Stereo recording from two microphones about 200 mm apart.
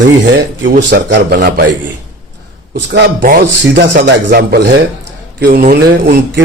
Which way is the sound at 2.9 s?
55° right (ahead or behind).